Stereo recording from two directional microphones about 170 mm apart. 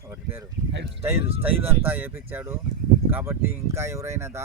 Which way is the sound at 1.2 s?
35° right (ahead or behind).